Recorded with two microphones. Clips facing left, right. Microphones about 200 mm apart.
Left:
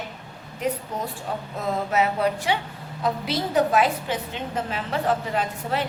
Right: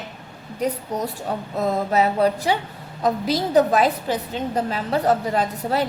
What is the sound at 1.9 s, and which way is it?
A woman's voice, 35° right (ahead or behind).